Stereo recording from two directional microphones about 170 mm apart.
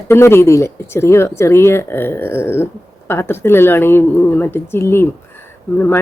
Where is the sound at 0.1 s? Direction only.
15° left (ahead or behind).